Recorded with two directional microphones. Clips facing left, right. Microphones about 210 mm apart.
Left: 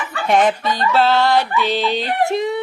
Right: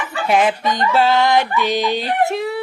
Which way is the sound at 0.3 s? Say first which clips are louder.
Left 1 dB; centre (ahead or behind).